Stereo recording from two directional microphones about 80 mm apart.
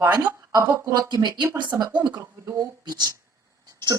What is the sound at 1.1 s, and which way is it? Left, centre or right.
Speech, right.